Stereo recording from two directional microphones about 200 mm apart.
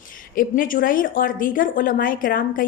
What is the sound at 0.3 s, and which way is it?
A woman's voice, 45° left (ahead or behind).